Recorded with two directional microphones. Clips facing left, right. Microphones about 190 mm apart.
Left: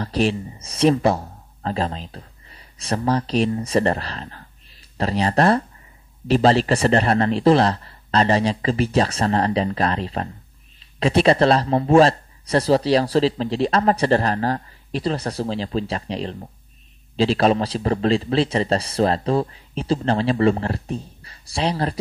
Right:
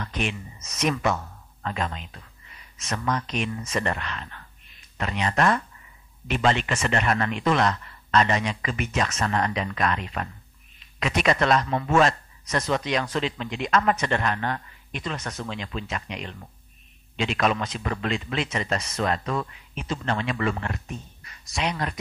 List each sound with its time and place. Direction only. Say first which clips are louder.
0.0 s a man's voice: left 9 dB; 35° left (ahead or behind)